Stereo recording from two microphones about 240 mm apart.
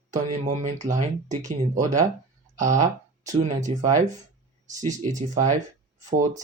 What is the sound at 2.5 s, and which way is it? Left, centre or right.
Speech, right.